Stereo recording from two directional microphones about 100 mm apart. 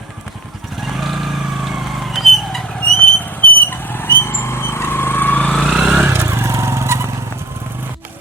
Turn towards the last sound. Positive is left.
turn(degrees=-25)  # may be behind; listen again after turning